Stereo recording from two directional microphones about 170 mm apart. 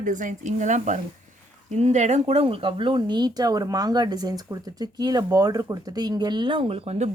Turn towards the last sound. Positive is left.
turn(degrees=-40)  # may be behind; listen again after turning